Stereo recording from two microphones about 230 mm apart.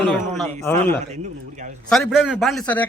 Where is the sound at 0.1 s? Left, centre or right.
Centre.